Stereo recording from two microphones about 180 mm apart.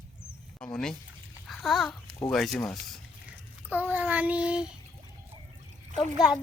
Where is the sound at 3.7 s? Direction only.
10° right (ahead or behind).